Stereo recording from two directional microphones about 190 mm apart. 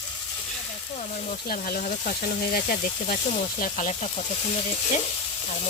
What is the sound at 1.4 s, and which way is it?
Speech, 50° left (ahead or behind).